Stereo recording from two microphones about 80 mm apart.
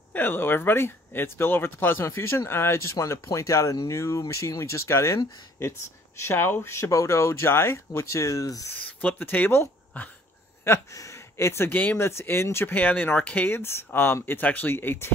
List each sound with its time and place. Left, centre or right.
0.1 s speech: left
9.0 s speech: left
10.6 s speech: left; by 13.5 s centre
13.5 s speech: left